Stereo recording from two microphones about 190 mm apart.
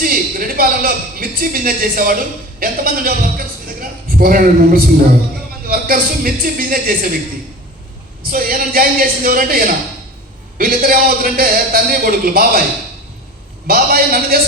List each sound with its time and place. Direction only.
0.0 s a man's voice: 50° right (ahead or behind)
2.6 s a sound: 50° right (ahead or behind)
5.6 s a man's voice: 50° right (ahead or behind)
8.2 s a man's voice: 50° right (ahead or behind)
13.7 s a man's voice: 50° right (ahead or behind)